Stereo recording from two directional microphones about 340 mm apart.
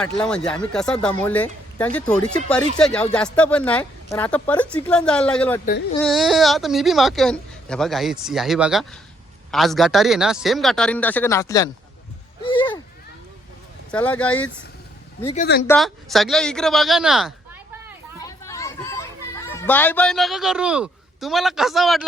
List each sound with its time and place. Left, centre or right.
0.0 s speech: centre
12.4 s a sound: centre
13.9 s speech: centre
15.3 s speech: left
15.6 s speech: centre
18.2 s children playing: centre